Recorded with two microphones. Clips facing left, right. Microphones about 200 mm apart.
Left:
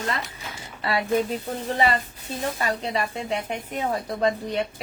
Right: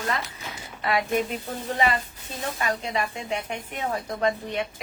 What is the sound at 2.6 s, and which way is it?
Speech, 35° left (ahead or behind).